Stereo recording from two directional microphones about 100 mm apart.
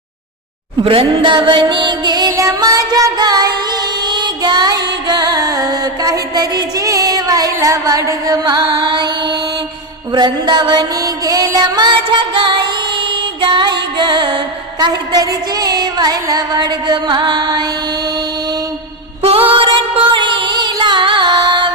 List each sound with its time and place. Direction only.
0.9 s music: 60° right (ahead or behind)
2.3 s music: 30° right (ahead or behind)
8.6 s music: 50° right (ahead or behind)
19.2 s music: 70° right (ahead or behind); by 21.7 s 45° right (ahead or behind)